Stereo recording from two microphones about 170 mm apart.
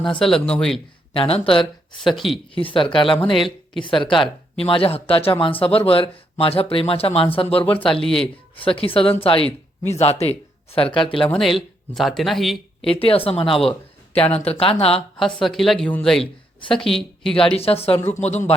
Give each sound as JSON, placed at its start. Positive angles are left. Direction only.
{"t": 0.2, "sound": "a woman's voice", "side_deg": 5}
{"t": 1.1, "sound": "speech", "side_deg": 30}
{"t": 1.9, "sound": "a woman's voice", "side_deg": 0}
{"t": 2.6, "sound": "speech", "side_deg": 30}
{"t": 11.3, "sound": "a woman's voice", "side_deg": 0}
{"t": 12.9, "sound": "speech", "side_deg": 35}
{"t": 15.2, "sound": "a woman's voice", "side_deg": 0}
{"t": 17.6, "sound": "speech", "side_deg": 35}